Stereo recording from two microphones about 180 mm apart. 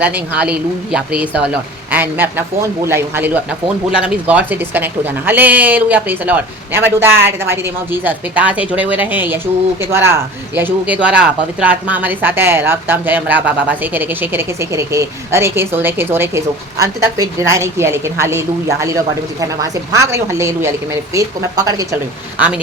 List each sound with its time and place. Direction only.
0.0 s speech: 10° right (ahead or behind)
22.4 s speech: 5° right (ahead or behind)